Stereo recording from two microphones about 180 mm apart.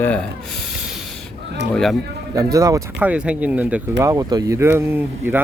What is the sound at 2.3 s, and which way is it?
Speech, 20° right (ahead or behind).